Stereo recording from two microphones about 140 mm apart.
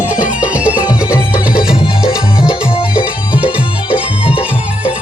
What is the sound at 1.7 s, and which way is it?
Music, 40° left (ahead or behind).